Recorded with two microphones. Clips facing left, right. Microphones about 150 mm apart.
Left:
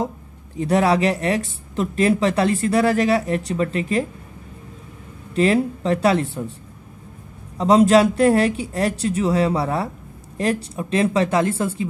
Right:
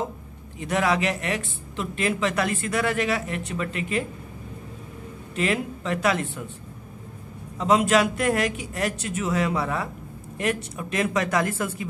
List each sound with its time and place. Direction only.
0.6 s speech: 35° left (ahead or behind)
5.3 s speech: 35° left (ahead or behind)
7.5 s speech: 35° left (ahead or behind)